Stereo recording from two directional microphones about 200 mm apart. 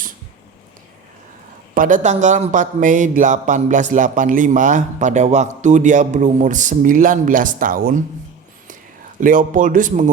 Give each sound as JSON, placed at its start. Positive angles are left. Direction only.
{"t": 1.7, "sound": "a man's voice", "side_deg": -40}
{"t": 9.2, "sound": "a man's voice", "side_deg": -40}